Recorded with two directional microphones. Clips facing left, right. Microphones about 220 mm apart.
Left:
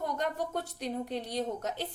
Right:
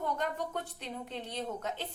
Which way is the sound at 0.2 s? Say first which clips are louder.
Left 2 dB; 40° left (ahead or behind).